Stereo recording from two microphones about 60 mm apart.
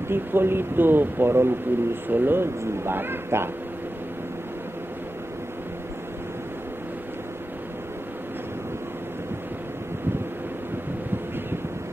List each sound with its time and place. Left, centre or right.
0.1 s speech: right